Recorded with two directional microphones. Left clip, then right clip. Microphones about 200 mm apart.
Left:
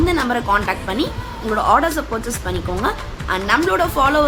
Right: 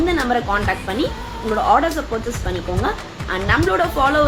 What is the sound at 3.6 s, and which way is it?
Speech, 15° left (ahead or behind).